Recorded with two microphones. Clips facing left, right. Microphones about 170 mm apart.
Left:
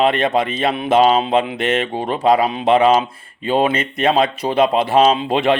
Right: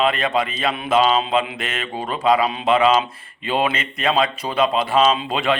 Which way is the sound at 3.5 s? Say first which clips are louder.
Left 4 dB; 40° left (ahead or behind).